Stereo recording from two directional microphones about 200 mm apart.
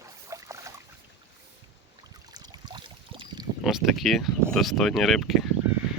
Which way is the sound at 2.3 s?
20° right (ahead or behind).